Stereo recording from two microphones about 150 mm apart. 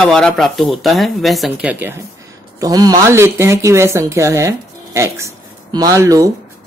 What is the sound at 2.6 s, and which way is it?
Speech, 25° right (ahead or behind).